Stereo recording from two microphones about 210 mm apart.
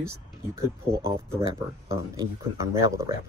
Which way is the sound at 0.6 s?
15° right (ahead or behind).